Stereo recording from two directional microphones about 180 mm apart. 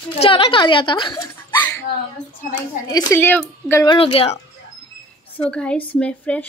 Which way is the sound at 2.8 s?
20° left (ahead or behind).